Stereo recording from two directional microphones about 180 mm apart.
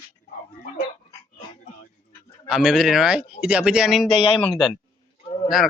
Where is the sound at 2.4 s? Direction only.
5° right (ahead or behind).